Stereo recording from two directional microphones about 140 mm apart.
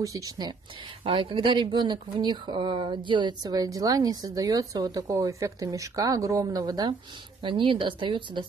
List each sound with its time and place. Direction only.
0.0 s speech: 25° right (ahead or behind)
1.0 s a woman's voice: 40° right (ahead or behind)